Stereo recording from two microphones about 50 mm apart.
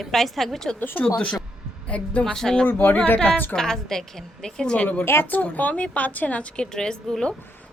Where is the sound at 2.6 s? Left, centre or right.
Left.